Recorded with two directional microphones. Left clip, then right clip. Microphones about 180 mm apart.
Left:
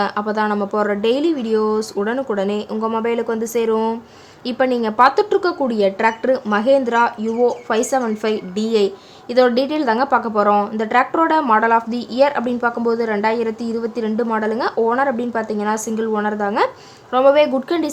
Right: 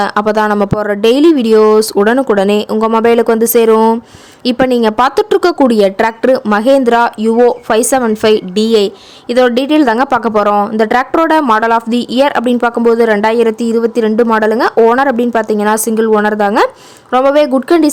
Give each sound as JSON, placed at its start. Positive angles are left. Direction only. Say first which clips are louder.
{"t": 0.0, "sound": "speech", "louder": "right 8 dB", "side_deg": -50}